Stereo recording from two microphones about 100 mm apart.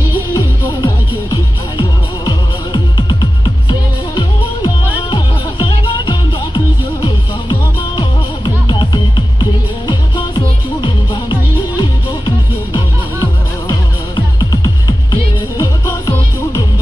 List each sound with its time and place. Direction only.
0.3 s music: 40° left (ahead or behind)
13.7 s music: 45° left (ahead or behind)